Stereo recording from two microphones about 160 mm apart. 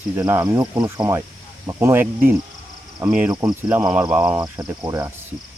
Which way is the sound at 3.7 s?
10° right (ahead or behind).